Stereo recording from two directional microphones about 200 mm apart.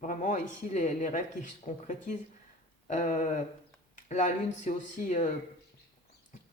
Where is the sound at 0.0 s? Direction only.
40° left (ahead or behind).